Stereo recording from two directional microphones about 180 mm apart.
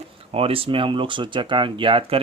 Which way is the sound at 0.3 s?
30° right (ahead or behind).